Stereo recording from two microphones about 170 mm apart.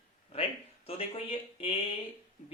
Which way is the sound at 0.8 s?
35° left (ahead or behind).